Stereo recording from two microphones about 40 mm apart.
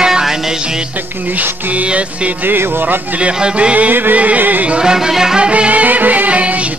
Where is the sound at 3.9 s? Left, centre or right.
Right.